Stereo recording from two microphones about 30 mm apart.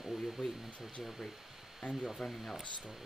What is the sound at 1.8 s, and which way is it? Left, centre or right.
Speech, left.